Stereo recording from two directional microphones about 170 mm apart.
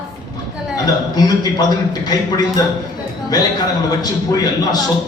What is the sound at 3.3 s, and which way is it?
Speech, 20° left (ahead or behind).